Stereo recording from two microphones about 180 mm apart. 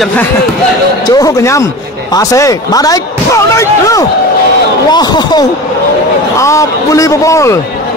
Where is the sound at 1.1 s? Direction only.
20° left (ahead or behind).